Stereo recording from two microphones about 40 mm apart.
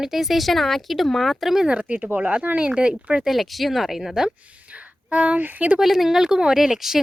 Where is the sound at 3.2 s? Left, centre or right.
Centre.